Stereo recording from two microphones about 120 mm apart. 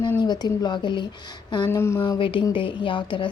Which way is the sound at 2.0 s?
45° left (ahead or behind).